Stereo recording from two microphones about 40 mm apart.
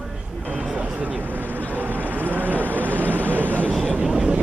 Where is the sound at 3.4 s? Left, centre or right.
Left.